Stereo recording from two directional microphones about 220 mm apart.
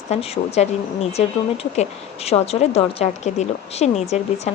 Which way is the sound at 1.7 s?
30° left (ahead or behind).